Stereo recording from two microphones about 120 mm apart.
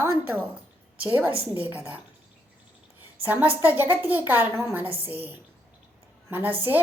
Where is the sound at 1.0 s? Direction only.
15° right (ahead or behind).